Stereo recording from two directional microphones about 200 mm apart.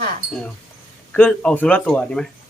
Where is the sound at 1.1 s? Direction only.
5° left (ahead or behind).